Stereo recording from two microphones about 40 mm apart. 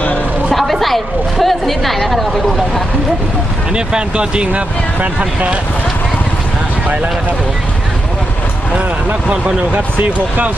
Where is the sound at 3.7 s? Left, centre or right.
Right.